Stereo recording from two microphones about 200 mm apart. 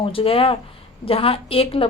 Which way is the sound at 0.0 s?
30° left (ahead or behind).